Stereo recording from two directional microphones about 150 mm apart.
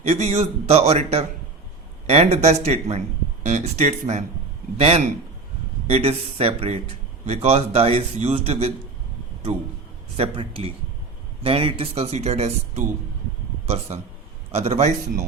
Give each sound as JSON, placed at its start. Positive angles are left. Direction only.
{"t": 0.0, "sound": "a man's voice", "side_deg": -45}
{"t": 10.2, "sound": "a man's voice", "side_deg": -40}
{"t": 14.5, "sound": "a man's voice", "side_deg": -45}